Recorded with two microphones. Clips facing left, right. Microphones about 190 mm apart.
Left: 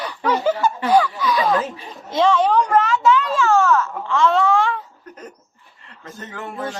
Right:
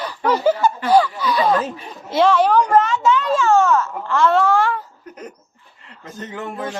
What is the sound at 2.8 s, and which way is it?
Baby cry, centre (ahead or behind).